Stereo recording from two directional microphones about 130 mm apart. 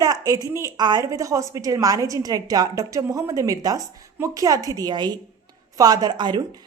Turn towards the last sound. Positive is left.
turn(degrees=-35)  # may be behind; listen again after turning